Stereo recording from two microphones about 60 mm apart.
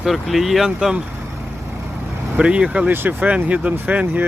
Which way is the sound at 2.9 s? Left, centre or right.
Right.